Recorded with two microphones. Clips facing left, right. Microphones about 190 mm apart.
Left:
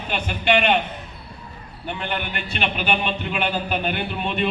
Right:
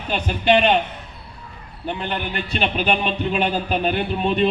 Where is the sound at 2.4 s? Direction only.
35° right (ahead or behind).